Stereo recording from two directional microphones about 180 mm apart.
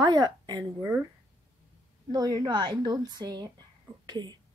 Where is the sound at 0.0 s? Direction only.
25° right (ahead or behind).